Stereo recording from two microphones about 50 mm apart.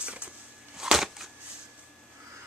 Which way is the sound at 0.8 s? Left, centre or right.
Centre.